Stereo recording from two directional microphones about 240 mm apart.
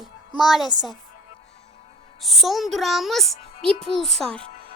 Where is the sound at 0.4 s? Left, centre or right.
Centre.